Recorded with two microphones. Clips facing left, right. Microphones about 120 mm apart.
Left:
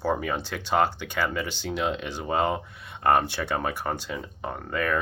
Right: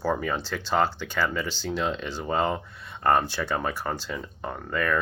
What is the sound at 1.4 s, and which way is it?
Speech, 60° left (ahead or behind).